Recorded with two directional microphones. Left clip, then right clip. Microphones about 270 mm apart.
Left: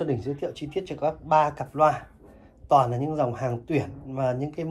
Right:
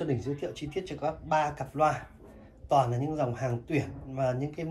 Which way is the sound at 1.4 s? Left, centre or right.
Left.